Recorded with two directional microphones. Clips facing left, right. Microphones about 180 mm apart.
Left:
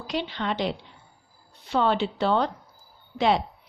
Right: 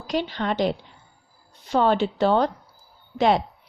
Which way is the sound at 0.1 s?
45° right (ahead or behind).